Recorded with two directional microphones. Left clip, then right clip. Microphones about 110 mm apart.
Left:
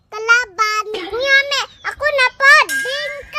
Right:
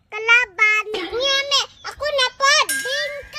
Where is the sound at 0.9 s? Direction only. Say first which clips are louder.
Left 1 dB; centre (ahead or behind).